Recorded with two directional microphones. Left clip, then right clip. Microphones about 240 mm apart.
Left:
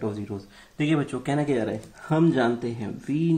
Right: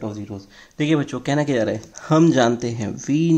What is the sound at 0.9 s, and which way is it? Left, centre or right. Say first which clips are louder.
Speech: right 5 dB; right.